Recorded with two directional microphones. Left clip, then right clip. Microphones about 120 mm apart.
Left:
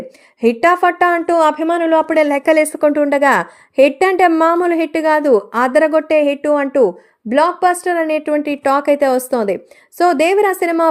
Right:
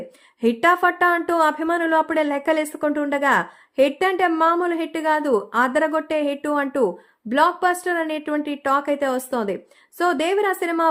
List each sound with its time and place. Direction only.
0.4 s a woman's voice: 15° left (ahead or behind)
2.2 s a woman's voice: 25° left (ahead or behind)
6.4 s a woman's voice: 15° left (ahead or behind)
8.1 s a woman's voice: 20° left (ahead or behind)